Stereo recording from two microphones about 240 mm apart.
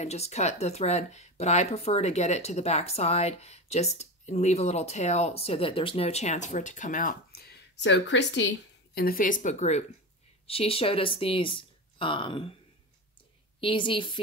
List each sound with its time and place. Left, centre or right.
0.0 s speech: left
13.6 s speech: left